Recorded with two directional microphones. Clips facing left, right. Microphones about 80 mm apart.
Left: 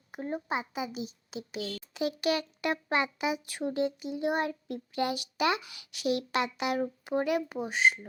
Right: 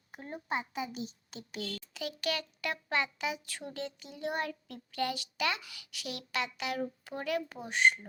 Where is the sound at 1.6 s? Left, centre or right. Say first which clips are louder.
Left 2 dB; right.